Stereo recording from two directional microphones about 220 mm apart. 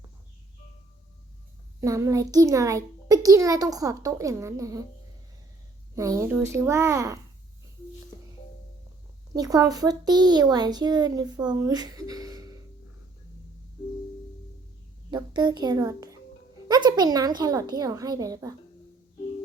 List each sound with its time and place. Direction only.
1.8 s speech: 15° right (ahead or behind)
5.9 s speech: 15° right (ahead or behind)
9.3 s speech: 15° right (ahead or behind)
15.1 s a child's voice: 20° right (ahead or behind)